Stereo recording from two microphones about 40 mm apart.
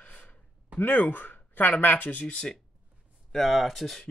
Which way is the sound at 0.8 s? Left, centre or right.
Left.